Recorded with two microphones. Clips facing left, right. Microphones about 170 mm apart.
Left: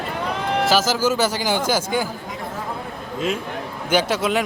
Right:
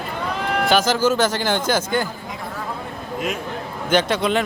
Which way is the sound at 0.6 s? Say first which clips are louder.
Right 2 dB; 5° left (ahead or behind).